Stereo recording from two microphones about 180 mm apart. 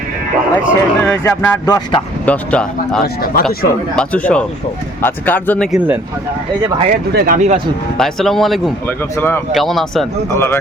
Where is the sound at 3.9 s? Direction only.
5° left (ahead or behind).